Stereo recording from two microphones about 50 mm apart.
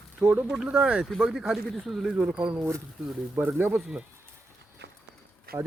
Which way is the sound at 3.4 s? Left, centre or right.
Right.